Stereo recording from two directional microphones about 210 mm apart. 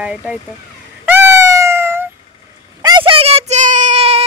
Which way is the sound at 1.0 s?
10° right (ahead or behind).